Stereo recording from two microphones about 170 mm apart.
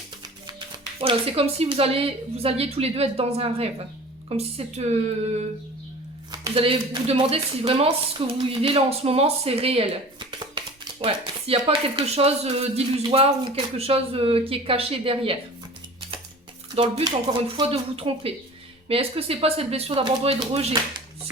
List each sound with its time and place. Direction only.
1.0 s speech: 35° right (ahead or behind)
6.4 s speech: 30° right (ahead or behind)
16.7 s speech: 30° right (ahead or behind)